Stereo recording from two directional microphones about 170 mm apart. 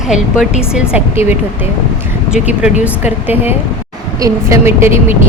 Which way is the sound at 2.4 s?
10° right (ahead or behind).